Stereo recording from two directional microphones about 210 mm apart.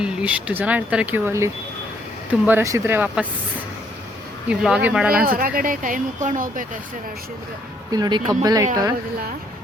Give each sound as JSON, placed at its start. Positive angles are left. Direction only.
{"t": 0.0, "sound": "speech", "side_deg": -5}
{"t": 2.5, "sound": "speech", "side_deg": -10}
{"t": 4.4, "sound": "speech", "side_deg": -5}
{"t": 5.2, "sound": "speech", "side_deg": -45}
{"t": 7.9, "sound": "speech", "side_deg": -20}